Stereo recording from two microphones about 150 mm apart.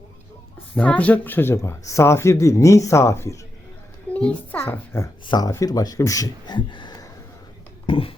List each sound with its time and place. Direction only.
0.8 s speech: 10° left (ahead or behind)
4.1 s a child's voice: 10° left (ahead or behind)
5.2 s speech: 30° left (ahead or behind)